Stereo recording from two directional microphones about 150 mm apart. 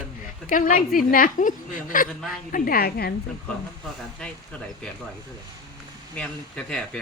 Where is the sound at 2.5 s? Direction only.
70° left (ahead or behind); by 3.2 s 90° left.